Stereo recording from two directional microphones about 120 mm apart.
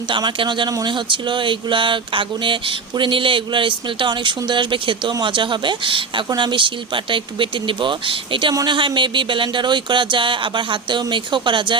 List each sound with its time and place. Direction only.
0.1 s speech: 40° right (ahead or behind)
0.7 s a sound: 35° right (ahead or behind)
8.5 s speech: 40° right (ahead or behind)